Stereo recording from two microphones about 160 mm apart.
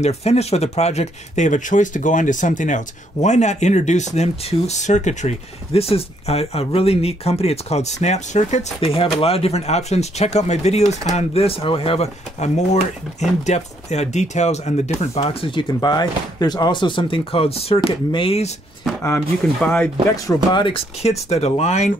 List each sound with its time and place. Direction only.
0.0 s speech: 40° left (ahead or behind)
15.1 s speech: 35° left (ahead or behind)
19.6 s speech: 10° left (ahead or behind)
20.2 s speech: 30° left (ahead or behind)